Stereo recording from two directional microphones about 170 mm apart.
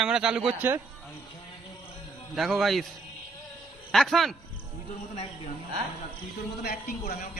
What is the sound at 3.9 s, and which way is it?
Speech, centre (ahead or behind).